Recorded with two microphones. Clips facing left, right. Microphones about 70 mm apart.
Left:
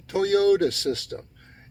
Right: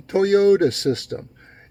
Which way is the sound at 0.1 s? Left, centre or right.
Right.